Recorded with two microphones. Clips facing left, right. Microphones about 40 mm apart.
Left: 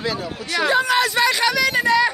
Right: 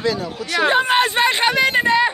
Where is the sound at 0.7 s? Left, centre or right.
Right.